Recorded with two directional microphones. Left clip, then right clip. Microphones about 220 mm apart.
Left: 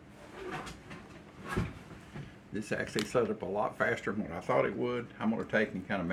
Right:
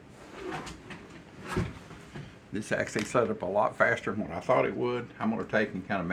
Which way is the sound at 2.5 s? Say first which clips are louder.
Right 4 dB; 35° right (ahead or behind).